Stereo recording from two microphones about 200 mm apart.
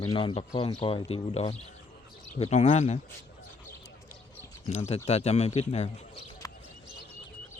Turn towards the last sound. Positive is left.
turn(degrees=15)  # may be behind; listen again after turning